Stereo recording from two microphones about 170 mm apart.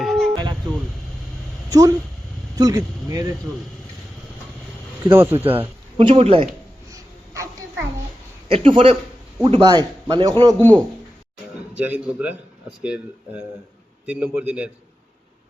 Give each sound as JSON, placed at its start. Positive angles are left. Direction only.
{"t": 0.0, "sound": "music", "side_deg": 0}
{"t": 2.6, "sound": "a man's voice", "side_deg": -20}
{"t": 5.1, "sound": "a man's voice", "side_deg": -15}
{"t": 6.0, "sound": "speech", "side_deg": -35}
{"t": 6.9, "sound": "babbling", "side_deg": -15}
{"t": 8.4, "sound": "a man's voice", "side_deg": -35}
{"t": 10.6, "sound": "speech", "side_deg": 10}
{"t": 11.8, "sound": "a man's voice", "side_deg": -10}